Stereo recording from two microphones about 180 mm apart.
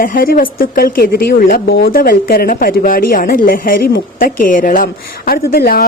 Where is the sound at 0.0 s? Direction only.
50° left (ahead or behind).